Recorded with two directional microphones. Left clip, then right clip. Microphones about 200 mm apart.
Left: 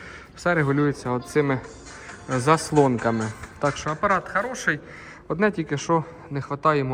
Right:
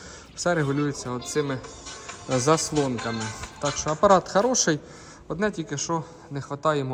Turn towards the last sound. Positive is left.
turn(degrees=-15)  # may be behind; listen again after turning